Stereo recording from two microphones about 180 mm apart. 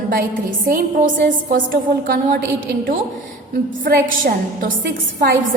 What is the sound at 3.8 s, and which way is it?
Speech, 55° right (ahead or behind).